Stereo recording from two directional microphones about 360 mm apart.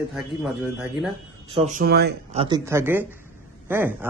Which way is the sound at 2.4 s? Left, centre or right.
Centre.